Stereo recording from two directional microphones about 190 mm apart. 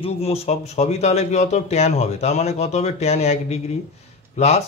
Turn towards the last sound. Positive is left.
turn(degrees=35)  # may be behind; listen again after turning